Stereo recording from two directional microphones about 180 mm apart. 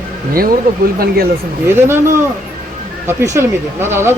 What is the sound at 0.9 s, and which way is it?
Speech, 60° right (ahead or behind).